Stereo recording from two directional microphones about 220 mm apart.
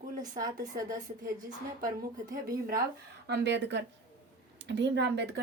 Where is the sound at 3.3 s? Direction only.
50° right (ahead or behind).